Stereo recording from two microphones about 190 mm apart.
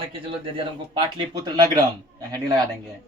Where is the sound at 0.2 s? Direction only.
30° right (ahead or behind).